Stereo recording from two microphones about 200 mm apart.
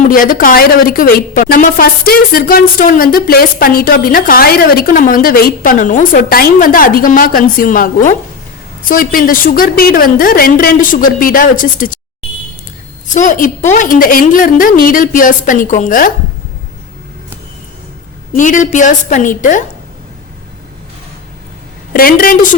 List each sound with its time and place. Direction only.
0.1 s a woman's voice: 45° left (ahead or behind)
13.1 s a woman's voice: 40° left (ahead or behind)
18.3 s a woman's voice: 40° left (ahead or behind)
21.9 s a woman's voice: 45° left (ahead or behind)